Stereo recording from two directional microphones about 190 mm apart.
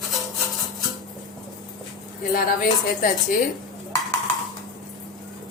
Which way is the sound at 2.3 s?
45° left (ahead or behind).